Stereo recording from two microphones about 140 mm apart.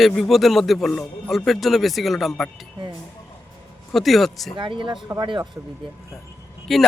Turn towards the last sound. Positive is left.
turn(degrees=0)  # may be behind; listen again after turning